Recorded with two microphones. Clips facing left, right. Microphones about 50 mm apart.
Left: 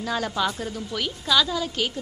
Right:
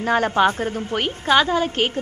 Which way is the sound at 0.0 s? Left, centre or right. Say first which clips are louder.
Right 8 dB; right.